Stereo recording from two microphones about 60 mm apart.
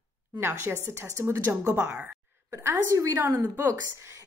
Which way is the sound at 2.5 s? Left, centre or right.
Right.